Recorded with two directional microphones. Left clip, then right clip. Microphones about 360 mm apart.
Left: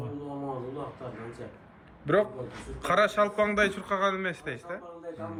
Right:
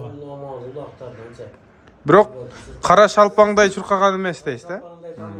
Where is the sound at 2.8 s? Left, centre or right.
Centre.